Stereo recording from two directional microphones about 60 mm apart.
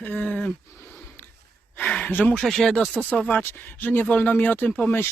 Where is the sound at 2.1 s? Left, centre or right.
Left.